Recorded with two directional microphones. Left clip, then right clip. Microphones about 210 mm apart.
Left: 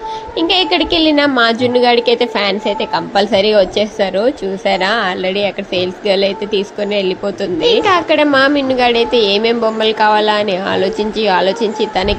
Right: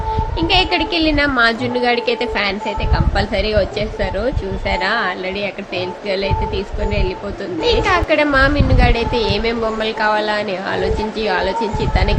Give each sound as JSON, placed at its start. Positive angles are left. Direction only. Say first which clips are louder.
{"t": 0.3, "sound": "a woman's voice", "louder": "left 3 dB", "side_deg": 20}